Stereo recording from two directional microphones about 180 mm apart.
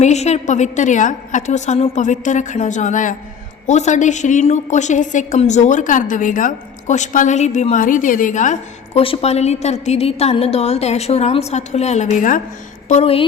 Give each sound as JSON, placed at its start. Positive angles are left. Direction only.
{"t": 0.0, "sound": "a woman's voice", "side_deg": 40}
{"t": 9.0, "sound": "a woman's voice", "side_deg": 30}